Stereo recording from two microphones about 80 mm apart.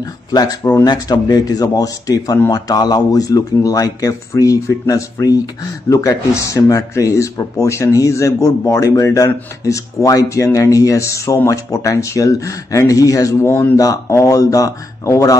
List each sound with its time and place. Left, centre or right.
0.3 s speech: left
13.5 s speech: left
13.7 s speech: left